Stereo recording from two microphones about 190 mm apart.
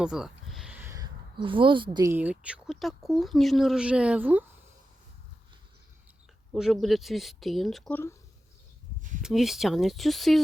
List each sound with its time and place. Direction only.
0.0 s a sound: 5° right (ahead or behind); by 2.1 s 20° right (ahead or behind)
2.1 s speech: 5° right (ahead or behind)
6.5 s speech: centre (ahead or behind)
9.2 s speech: centre (ahead or behind)